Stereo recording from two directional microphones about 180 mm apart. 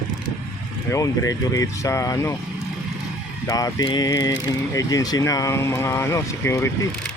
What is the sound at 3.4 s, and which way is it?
Speech, 20° left (ahead or behind).